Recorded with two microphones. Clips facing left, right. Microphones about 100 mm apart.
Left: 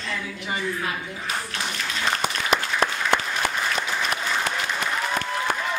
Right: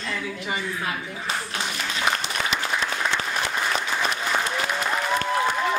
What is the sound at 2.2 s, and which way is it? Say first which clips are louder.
Applause: left 3 dB; 50° left (ahead or behind).